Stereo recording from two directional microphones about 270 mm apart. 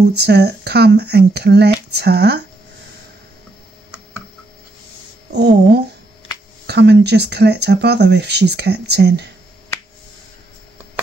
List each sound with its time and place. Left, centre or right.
0.0 s speech: right
5.3 s speech: right